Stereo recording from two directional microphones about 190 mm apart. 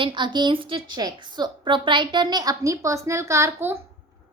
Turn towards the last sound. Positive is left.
turn(degrees=-15)  # may be behind; listen again after turning